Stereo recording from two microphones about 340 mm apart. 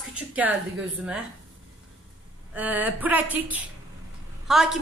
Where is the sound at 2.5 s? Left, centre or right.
Centre.